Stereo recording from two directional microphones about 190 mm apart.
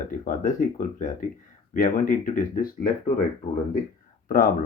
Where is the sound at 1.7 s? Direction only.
45° left (ahead or behind).